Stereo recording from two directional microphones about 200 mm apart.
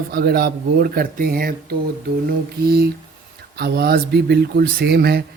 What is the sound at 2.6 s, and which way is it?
Speech, 50° right (ahead or behind).